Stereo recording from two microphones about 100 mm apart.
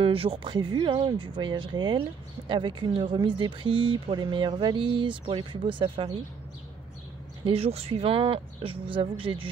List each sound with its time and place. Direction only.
0.0 s speech: 65° right (ahead or behind)
7.4 s speech: 85° right; by 9.5 s 60° right (ahead or behind)